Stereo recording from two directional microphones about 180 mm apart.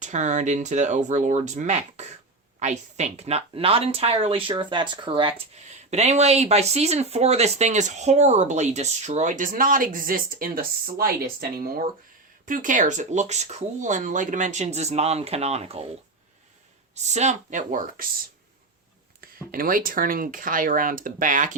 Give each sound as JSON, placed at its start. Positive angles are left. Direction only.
{"t": 0.0, "sound": "speech", "side_deg": -40}
{"t": 16.9, "sound": "speech", "side_deg": -40}
{"t": 19.5, "sound": "speech", "side_deg": -55}